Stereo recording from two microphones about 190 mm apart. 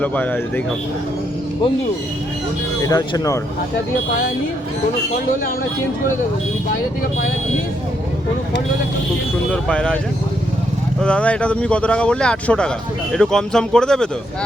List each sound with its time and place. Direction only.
0.0 s speech: 10° left (ahead or behind)
2.8 s speech: 20° left (ahead or behind)
9.5 s speech: 5° left (ahead or behind)
11.0 s speech: 5° left (ahead or behind)